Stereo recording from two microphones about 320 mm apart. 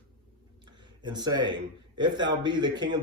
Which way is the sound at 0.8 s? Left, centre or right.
Centre.